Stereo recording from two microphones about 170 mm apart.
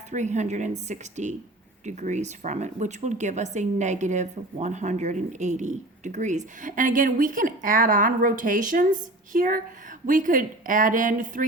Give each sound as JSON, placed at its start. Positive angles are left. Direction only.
{"t": 0.1, "sound": "speech", "side_deg": -45}